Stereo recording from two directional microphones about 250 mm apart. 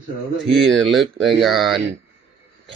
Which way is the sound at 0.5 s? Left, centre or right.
Centre.